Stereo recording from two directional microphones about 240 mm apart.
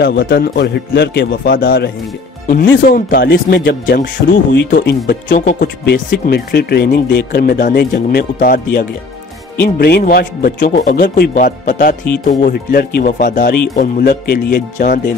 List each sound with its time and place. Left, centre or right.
0.0 s speech: left